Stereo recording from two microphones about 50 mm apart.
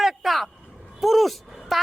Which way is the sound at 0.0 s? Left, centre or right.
Centre.